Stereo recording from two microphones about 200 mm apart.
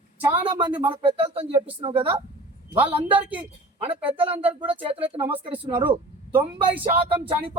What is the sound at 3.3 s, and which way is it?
Speech, 25° right (ahead or behind).